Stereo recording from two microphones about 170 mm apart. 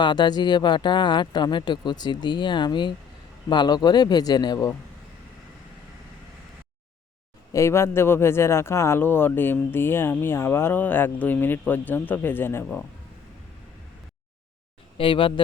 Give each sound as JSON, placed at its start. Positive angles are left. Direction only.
{"t": 0.0, "sound": "speech", "side_deg": 25}
{"t": 7.5, "sound": "speech", "side_deg": 15}
{"t": 14.9, "sound": "speech", "side_deg": 30}